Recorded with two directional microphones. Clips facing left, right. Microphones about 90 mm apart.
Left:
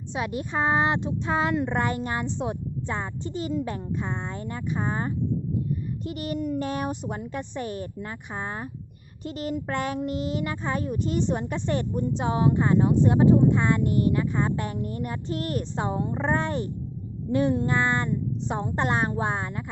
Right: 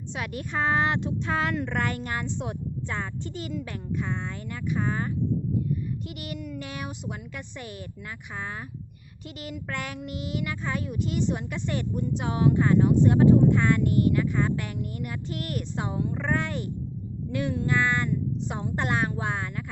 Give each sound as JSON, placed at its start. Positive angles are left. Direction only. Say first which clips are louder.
{"t": 0.1, "sound": "a woman's voice", "louder": "left 4 dB", "side_deg": 25}